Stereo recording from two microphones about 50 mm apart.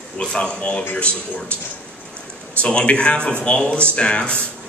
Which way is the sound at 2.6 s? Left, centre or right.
Left.